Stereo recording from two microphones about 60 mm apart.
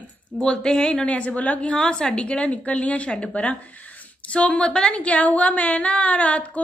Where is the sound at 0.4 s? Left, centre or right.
Centre.